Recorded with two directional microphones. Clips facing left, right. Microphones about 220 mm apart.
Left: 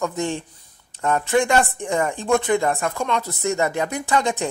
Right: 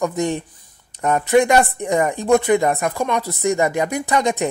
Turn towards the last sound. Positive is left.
turn(degrees=-15)  # may be behind; listen again after turning